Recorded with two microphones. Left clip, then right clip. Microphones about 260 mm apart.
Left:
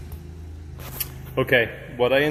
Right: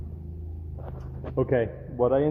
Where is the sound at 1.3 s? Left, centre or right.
Centre.